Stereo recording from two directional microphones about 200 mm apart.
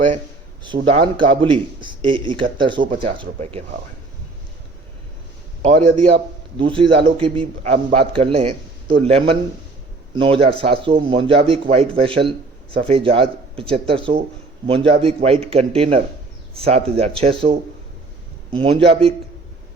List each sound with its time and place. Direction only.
0.6 s a man's voice: 25° right (ahead or behind)
6.6 s a man's voice: 25° right (ahead or behind)